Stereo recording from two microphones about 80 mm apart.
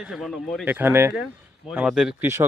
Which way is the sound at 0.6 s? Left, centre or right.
Right.